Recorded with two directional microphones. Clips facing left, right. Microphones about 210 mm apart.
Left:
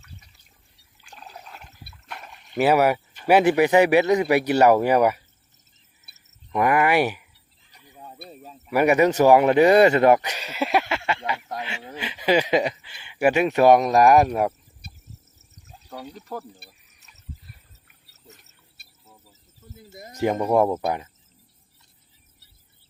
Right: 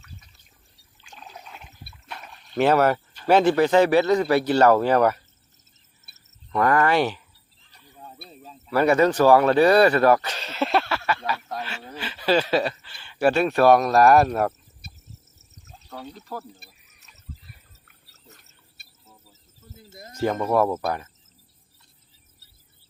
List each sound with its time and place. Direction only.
1.1 s toilet flush: centre (ahead or behind)
2.1 s rowboat: 15° left (ahead or behind)
2.6 s speech: 10° left (ahead or behind)
6.5 s fowl: 15° left (ahead or behind)
8.4 s speech: 10° left (ahead or behind)
15.8 s speech: 10° left (ahead or behind)
19.9 s speech: 15° left (ahead or behind)